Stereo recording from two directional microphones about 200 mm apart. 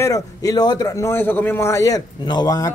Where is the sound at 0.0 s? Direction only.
15° left (ahead or behind).